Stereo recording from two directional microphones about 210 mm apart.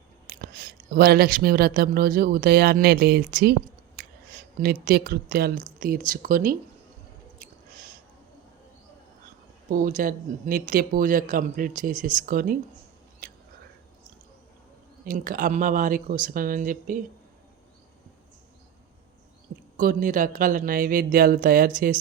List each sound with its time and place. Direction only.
0.3 s speech: 45° right (ahead or behind)
4.0 s a sound: 50° right (ahead or behind)
4.6 s speech: 45° right (ahead or behind)
7.3 s squish: 40° right (ahead or behind)
9.6 s speech: 40° right (ahead or behind)
15.0 s speech: 40° right (ahead or behind)
19.7 s speech: 40° right (ahead or behind)